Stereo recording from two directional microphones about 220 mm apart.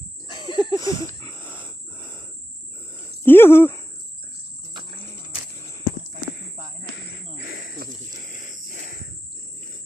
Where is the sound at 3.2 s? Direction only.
10° left (ahead or behind).